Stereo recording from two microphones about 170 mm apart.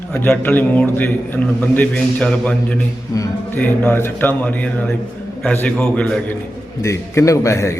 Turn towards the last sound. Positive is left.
turn(degrees=15)  # may be behind; listen again after turning